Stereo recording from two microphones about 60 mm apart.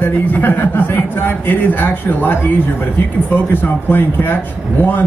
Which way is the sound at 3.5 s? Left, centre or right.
Left.